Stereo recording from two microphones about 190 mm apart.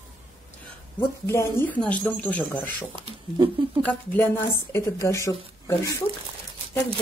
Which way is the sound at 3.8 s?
10° left (ahead or behind).